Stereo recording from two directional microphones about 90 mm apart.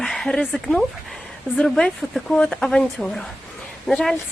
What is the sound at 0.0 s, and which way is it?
Speech, 5° left (ahead or behind).